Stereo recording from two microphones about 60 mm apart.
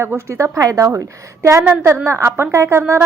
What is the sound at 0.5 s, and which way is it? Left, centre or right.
Speech, right.